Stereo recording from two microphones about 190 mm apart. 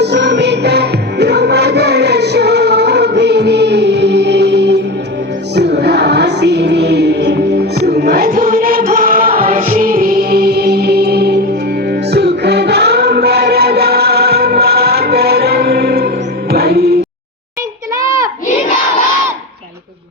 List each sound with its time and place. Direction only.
0.0 s music: 60° right (ahead or behind)
9.4 s music: 35° right (ahead or behind); by 17.0 s 55° right (ahead or behind)
17.9 s child singing: 15° right (ahead or behind)